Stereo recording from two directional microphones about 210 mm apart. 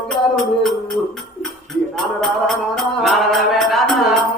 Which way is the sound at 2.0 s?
Centre (ahead or behind).